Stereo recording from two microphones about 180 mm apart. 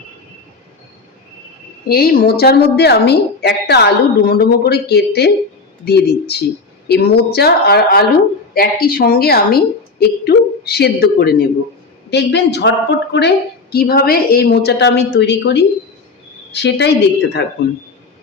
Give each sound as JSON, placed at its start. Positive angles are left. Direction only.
{"t": 1.9, "sound": "a woman's voice", "side_deg": 60}
{"t": 12.1, "sound": "a woman's voice", "side_deg": 70}